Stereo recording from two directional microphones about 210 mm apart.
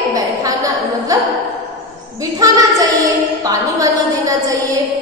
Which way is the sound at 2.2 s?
15° right (ahead or behind).